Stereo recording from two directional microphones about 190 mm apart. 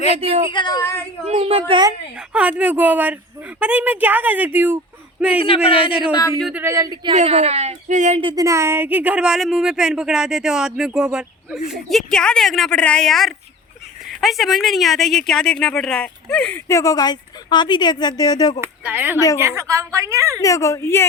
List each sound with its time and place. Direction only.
0.2 s a woman's voice: 30° right (ahead or behind)
0.4 s a woman's voice: 25° left (ahead or behind)
1.4 s a woman's voice: 30° right (ahead or behind)
2.3 s a woman's voice: 5° right (ahead or behind)
5.6 s a woman's voice: 30° left (ahead or behind)
5.9 s a woman's voice: 5° right (ahead or behind)
7.1 s speech: 35° right (ahead or behind); by 18.6 s 20° left (ahead or behind)
18.6 s a woman's voice: 10° right (ahead or behind)
20.4 s speech: 15° left (ahead or behind)